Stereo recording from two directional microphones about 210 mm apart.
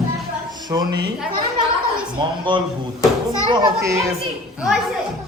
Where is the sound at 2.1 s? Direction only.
25° right (ahead or behind).